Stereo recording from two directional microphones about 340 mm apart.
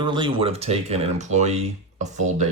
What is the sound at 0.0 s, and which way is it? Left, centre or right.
Speech, centre.